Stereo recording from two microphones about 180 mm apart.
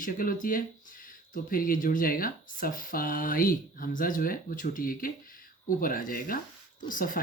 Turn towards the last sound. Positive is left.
turn(degrees=50)  # may be behind; listen again after turning